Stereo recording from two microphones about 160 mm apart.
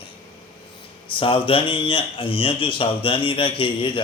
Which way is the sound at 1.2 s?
35° left (ahead or behind).